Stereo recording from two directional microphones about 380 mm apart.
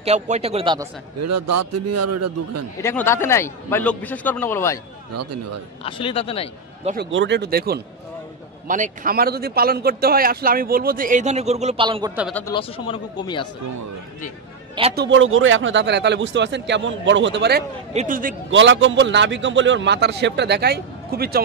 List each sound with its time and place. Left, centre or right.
0.0 s speech: centre
1.2 s a man's voice: right
2.8 s a man's voice: centre
5.1 s a man's voice: right
5.9 s speech: centre
6.8 s a man's voice: centre
7.1 s speech: right; by 12.3 s centre
12.3 s speech: centre
14.8 s speech: centre
15.0 s speech: right